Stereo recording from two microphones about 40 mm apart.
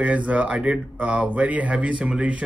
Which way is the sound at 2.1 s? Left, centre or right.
Right.